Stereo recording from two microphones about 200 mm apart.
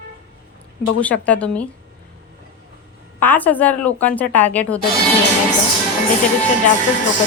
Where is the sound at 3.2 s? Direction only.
10° left (ahead or behind).